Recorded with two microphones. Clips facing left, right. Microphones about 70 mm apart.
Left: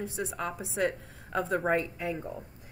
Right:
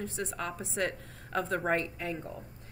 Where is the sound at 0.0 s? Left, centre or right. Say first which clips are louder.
Left 2 dB; centre.